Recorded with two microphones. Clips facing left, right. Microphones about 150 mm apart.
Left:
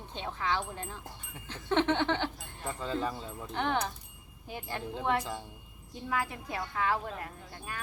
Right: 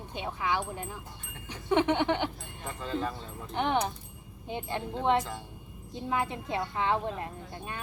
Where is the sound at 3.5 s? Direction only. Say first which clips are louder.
Right 3 dB; 20° right (ahead or behind).